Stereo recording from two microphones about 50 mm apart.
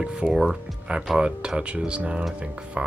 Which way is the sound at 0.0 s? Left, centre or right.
Centre.